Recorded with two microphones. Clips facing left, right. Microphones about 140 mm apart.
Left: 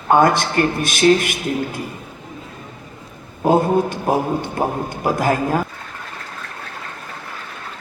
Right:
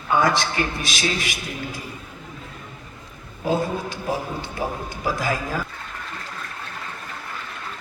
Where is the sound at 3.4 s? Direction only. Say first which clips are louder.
Left 8 dB; 50° left (ahead or behind).